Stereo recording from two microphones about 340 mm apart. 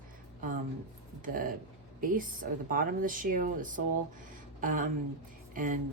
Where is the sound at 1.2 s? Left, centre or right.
Right.